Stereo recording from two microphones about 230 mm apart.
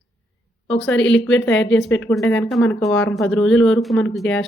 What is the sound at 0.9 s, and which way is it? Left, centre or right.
Speech, left.